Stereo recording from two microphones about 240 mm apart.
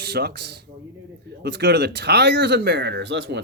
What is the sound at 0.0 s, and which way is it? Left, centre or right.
Speech, right.